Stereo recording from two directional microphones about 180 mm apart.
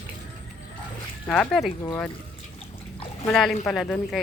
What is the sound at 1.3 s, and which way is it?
Speech, 5° left (ahead or behind).